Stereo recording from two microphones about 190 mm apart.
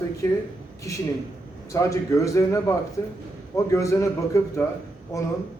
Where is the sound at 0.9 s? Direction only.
15° left (ahead or behind).